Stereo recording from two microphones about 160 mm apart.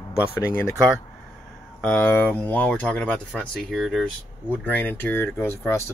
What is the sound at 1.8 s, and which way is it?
Speech, 10° left (ahead or behind).